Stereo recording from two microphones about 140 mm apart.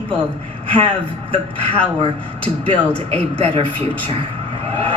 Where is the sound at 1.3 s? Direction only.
10° left (ahead or behind).